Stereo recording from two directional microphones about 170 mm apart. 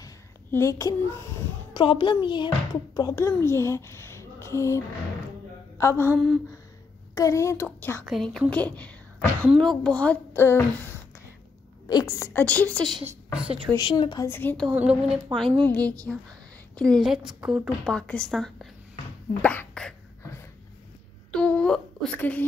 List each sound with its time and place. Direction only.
0.0 s a sound: 15° left (ahead or behind)
1.7 s a child's voice: 30° left (ahead or behind)
6.1 s a woman's voice: centre (ahead or behind)
7.2 s a child's voice: 20° left (ahead or behind)
8.0 s a woman's voice: centre (ahead or behind)
13.0 s a woman's voice: 5° right (ahead or behind)
13.7 s speech: 25° left (ahead or behind)
14.2 s a child's voice: 10° left (ahead or behind)
14.8 s a woman's voice: 5° right (ahead or behind)
15.6 s a child's voice: 10° left (ahead or behind)
21.3 s a sound: 5° left (ahead or behind)